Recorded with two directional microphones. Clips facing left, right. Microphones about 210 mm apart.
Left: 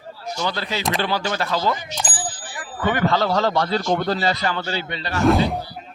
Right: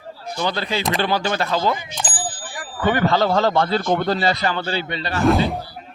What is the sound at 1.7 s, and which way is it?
Speech, 55° right (ahead or behind).